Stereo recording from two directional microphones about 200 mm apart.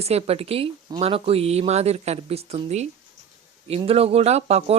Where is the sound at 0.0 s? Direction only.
30° right (ahead or behind).